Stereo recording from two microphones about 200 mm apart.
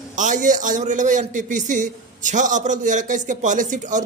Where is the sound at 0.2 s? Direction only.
40° right (ahead or behind).